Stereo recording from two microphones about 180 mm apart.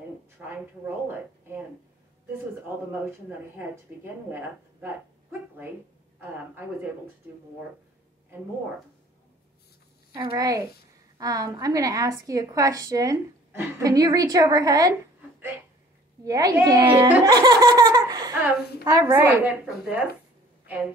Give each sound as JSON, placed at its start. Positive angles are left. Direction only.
{"t": 0.5, "sound": "a woman's voice", "side_deg": -15}
{"t": 2.9, "sound": "a woman's voice", "side_deg": -10}
{"t": 10.1, "sound": "a woman's voice", "side_deg": -25}
{"t": 16.3, "sound": "a woman's voice", "side_deg": -20}
{"t": 17.0, "sound": "laughter", "side_deg": -20}
{"t": 18.9, "sound": "a woman's voice", "side_deg": -20}